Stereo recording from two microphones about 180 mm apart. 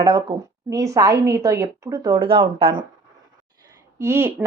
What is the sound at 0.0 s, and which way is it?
A woman's voice, 25° right (ahead or behind).